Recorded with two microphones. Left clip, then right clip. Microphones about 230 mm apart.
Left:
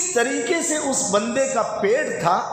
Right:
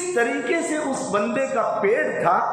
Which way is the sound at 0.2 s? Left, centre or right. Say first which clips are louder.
Left 1 dB; left.